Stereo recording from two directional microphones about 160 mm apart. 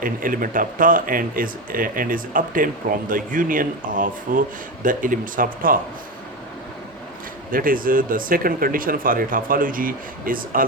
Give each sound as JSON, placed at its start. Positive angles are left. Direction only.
{"t": 0.0, "sound": "speech", "side_deg": -60}
{"t": 7.5, "sound": "speech", "side_deg": -60}